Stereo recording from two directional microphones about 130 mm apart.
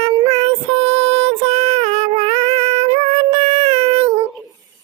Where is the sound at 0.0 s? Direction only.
50° right (ahead or behind).